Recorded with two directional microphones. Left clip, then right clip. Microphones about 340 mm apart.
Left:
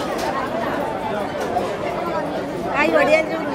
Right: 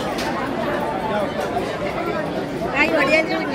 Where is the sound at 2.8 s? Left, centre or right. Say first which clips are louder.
Left 1 dB; left.